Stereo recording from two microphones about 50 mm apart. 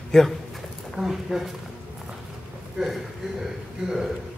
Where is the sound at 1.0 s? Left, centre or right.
Centre.